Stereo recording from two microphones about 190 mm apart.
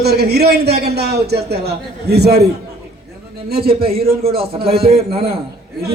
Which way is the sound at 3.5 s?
55° right (ahead or behind).